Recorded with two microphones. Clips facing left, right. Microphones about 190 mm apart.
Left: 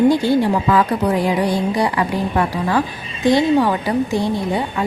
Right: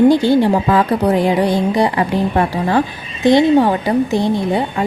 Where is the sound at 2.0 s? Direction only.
35° right (ahead or behind).